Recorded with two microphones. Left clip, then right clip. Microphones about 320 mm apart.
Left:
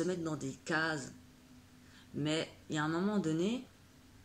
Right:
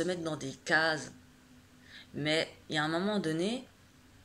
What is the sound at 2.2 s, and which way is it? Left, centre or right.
Speech, centre.